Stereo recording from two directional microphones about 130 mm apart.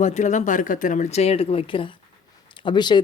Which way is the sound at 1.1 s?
50° left (ahead or behind).